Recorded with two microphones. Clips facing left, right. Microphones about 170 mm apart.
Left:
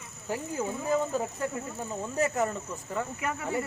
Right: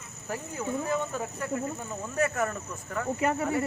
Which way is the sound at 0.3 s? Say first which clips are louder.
Left 1 dB; 25° left (ahead or behind).